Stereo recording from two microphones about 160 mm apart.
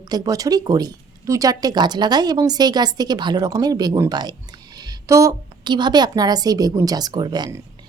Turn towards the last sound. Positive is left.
turn(degrees=-25)  # may be behind; listen again after turning